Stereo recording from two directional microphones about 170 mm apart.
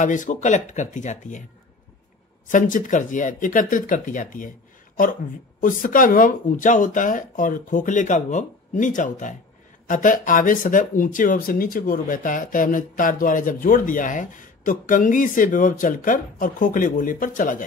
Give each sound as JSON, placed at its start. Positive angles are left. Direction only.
{"t": 0.0, "sound": "speech", "side_deg": 45}
{"t": 2.4, "sound": "speech", "side_deg": 50}
{"t": 5.6, "sound": "speech", "side_deg": 50}